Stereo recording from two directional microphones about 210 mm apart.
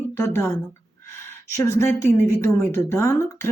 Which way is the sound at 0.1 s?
10° left (ahead or behind).